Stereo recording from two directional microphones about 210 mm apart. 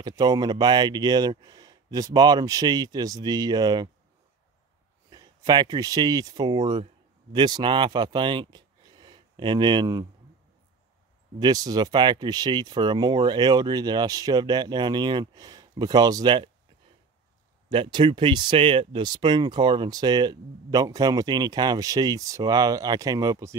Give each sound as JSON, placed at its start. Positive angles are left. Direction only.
{"t": 0.0, "sound": "speech", "side_deg": -20}
{"t": 5.1, "sound": "speech", "side_deg": -20}
{"t": 11.3, "sound": "speech", "side_deg": -20}
{"t": 17.6, "sound": "speech", "side_deg": -20}